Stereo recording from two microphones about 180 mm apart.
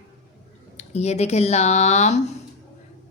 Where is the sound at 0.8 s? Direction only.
40° left (ahead or behind).